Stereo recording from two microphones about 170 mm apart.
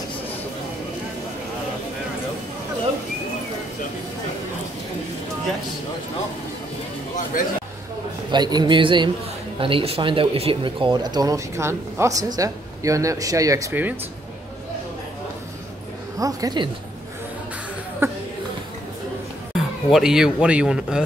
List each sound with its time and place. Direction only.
8.3 s speech: 25° right (ahead or behind)
16.2 s speech: 20° right (ahead or behind)
18.0 s speech: 15° right (ahead or behind)
19.5 s speech: 5° right (ahead or behind)